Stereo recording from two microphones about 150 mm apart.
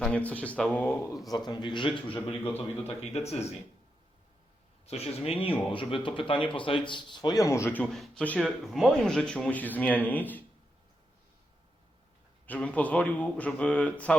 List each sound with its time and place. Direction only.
0.0 s speech: 10° left (ahead or behind)
1.5 s a man's voice: 30° left (ahead or behind)
2.1 s speech: 15° left (ahead or behind)
3.2 s speech: 45° left (ahead or behind)
4.9 s speech: 40° left (ahead or behind); by 10.4 s 10° left (ahead or behind)
12.5 s speech: 10° left (ahead or behind)